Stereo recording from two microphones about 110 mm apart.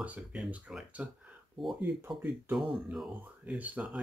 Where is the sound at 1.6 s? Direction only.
Centre (ahead or behind).